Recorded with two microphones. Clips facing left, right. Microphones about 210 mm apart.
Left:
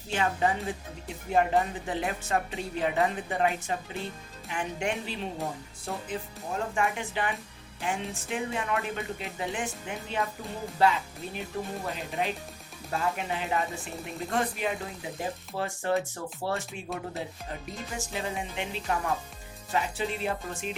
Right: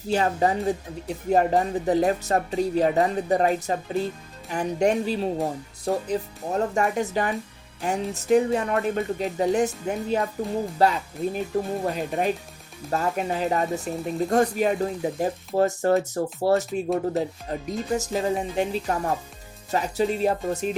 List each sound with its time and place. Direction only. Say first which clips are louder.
0.1 s speech: right 5 dB; 40° right (ahead or behind)